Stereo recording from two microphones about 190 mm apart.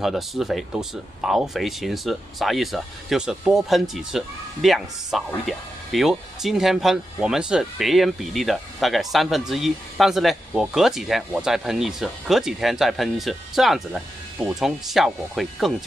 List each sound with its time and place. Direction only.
0.0 s speech: centre (ahead or behind)